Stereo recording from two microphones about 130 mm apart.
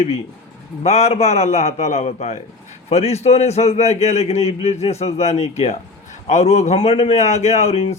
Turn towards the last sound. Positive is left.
turn(degrees=50)  # may be behind; listen again after turning